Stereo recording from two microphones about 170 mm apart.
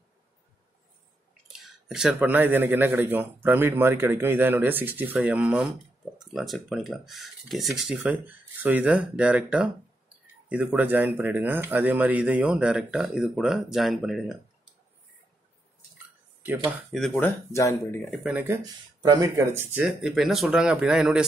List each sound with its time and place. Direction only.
1.5 s speech: 5° right (ahead or behind)
16.9 s speech: centre (ahead or behind)
17.2 s speech: 15° left (ahead or behind)
18.1 s speech: 5° right (ahead or behind)
18.5 s speech: 20° right (ahead or behind); by 21.3 s 5° right (ahead or behind)